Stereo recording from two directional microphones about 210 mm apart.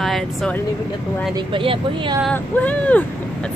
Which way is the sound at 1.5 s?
25° right (ahead or behind).